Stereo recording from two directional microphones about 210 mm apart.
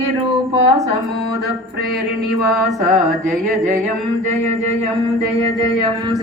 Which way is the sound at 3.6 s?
35° right (ahead or behind).